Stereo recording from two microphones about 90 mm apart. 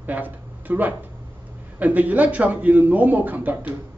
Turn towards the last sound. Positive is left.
turn(degrees=-20)  # may be behind; listen again after turning